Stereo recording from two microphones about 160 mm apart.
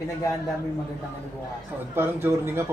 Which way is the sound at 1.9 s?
15° right (ahead or behind).